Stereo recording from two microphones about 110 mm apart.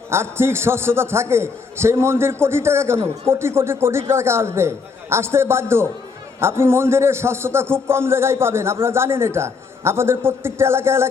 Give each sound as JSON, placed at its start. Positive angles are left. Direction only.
{"t": 0.1, "sound": "a man's voice", "side_deg": -25}